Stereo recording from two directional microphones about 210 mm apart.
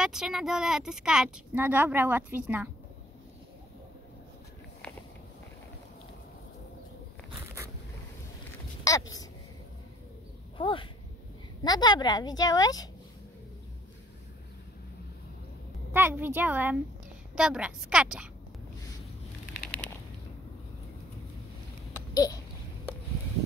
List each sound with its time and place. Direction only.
0.0 s speech: 5° right (ahead or behind)
8.9 s speech: 15° left (ahead or behind)
10.6 s a woman's voice: 25° left (ahead or behind)
15.9 s a woman's voice: 10° right (ahead or behind)
21.9 s a sound: 15° left (ahead or behind)